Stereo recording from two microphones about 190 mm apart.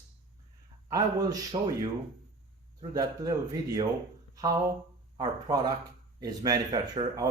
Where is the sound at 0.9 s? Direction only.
20° right (ahead or behind).